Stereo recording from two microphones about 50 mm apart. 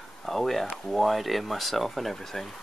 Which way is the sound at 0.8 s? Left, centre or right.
Centre.